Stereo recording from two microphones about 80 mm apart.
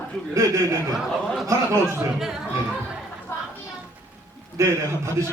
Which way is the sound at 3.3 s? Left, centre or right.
Left.